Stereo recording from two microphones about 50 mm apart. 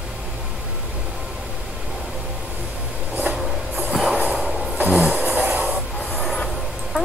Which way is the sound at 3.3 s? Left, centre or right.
Centre.